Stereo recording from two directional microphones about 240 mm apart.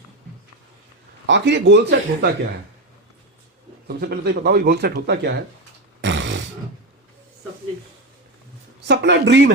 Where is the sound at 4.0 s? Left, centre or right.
Right.